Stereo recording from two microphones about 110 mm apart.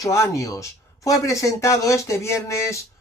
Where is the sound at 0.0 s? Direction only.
30° left (ahead or behind).